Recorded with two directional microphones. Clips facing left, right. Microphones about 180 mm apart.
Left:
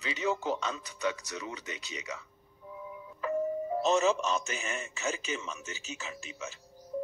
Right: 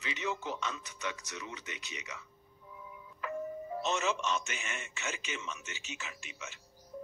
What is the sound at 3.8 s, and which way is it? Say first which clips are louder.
A man's voice: left 6 dB; 35° left (ahead or behind).